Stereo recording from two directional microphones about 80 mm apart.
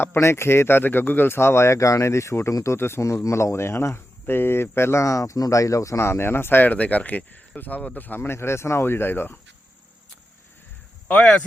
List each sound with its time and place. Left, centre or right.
0.0 s speech: left